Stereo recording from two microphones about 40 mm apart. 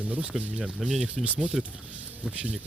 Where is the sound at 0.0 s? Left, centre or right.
Right.